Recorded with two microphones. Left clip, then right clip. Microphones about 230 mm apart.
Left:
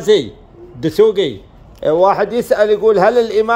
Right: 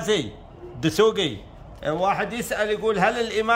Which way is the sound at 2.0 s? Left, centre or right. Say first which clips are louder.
Left 11 dB; centre.